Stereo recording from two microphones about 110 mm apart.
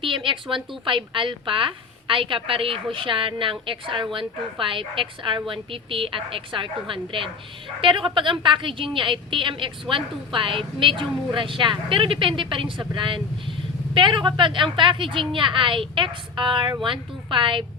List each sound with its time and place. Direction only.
0.0 s a woman's voice: 50° right (ahead or behind)